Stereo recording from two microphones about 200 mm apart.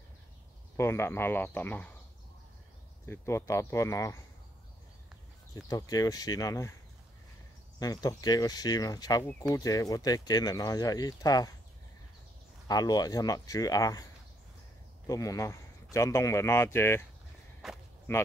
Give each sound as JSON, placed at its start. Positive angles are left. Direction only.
{"t": 0.7, "sound": "speech", "side_deg": 15}
{"t": 3.1, "sound": "speech", "side_deg": 15}
{"t": 5.5, "sound": "speech", "side_deg": 20}
{"t": 7.8, "sound": "speech", "side_deg": 20}
{"t": 12.6, "sound": "speech", "side_deg": 20}
{"t": 15.0, "sound": "speech", "side_deg": 15}
{"t": 17.6, "sound": "speech", "side_deg": 0}
{"t": 18.1, "sound": "speech", "side_deg": 10}